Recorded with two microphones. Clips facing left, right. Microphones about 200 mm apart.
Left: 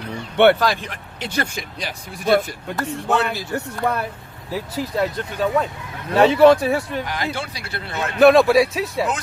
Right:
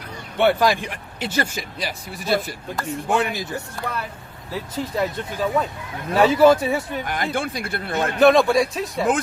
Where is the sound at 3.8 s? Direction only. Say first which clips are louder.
Left 8 dB; 60° left (ahead or behind).